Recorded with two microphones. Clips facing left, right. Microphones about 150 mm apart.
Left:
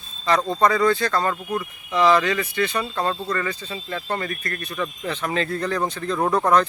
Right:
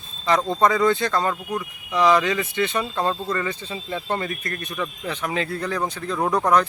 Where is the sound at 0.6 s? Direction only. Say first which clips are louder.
Even; 20° right (ahead or behind).